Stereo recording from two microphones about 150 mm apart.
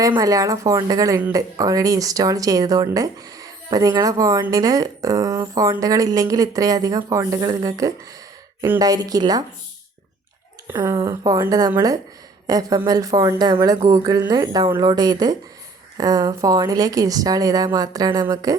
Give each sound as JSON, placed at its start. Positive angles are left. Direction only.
{"t": 0.0, "sound": "speech", "side_deg": -25}
{"t": 10.7, "sound": "speech", "side_deg": -20}